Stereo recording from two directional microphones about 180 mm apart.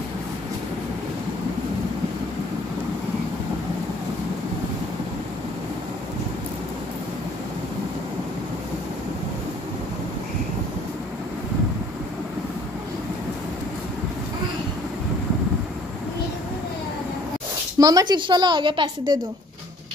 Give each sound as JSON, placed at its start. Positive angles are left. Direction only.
{"t": 17.7, "sound": "a woman's voice", "side_deg": -20}